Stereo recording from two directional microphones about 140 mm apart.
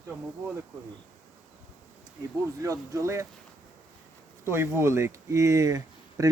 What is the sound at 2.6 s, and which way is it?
Speech, 25° right (ahead or behind).